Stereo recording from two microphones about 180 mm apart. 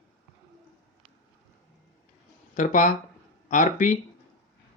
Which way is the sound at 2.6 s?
45° left (ahead or behind).